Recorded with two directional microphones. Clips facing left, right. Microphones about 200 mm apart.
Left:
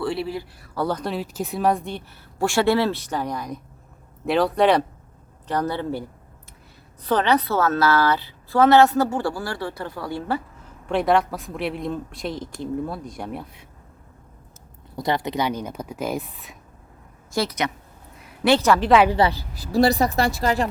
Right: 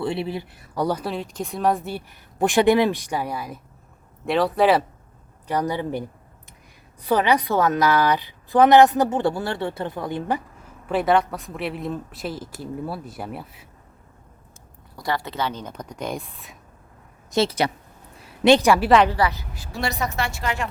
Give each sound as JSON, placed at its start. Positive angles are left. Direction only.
{"t": 0.0, "sound": "speech", "side_deg": -20}
{"t": 1.1, "sound": "a woman's voice", "side_deg": 5}
{"t": 10.8, "sound": "speech", "side_deg": 0}
{"t": 14.9, "sound": "speech", "side_deg": 20}
{"t": 17.3, "sound": "a woman's voice", "side_deg": -30}
{"t": 18.9, "sound": "speech", "side_deg": 5}
{"t": 19.1, "sound": "a woman's voice", "side_deg": 30}